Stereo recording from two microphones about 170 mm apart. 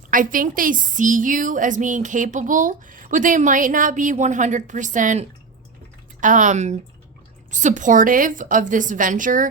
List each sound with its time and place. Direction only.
0.1 s a woman's voice: 55° right (ahead or behind)